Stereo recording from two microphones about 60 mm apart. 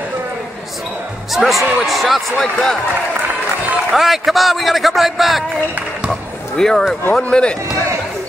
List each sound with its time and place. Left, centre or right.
1.3 s speech: centre
3.9 s speech: centre
6.5 s speech: centre